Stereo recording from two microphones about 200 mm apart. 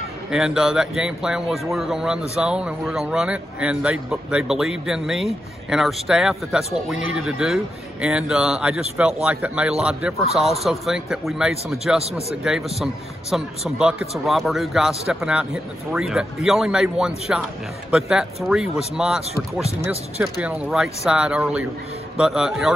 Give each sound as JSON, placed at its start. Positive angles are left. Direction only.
{"t": 0.3, "sound": "speech", "side_deg": -5}
{"t": 12.0, "sound": "a man's voice", "side_deg": -30}
{"t": 12.4, "sound": "speech", "side_deg": 0}
{"t": 20.4, "sound": "speech", "side_deg": -5}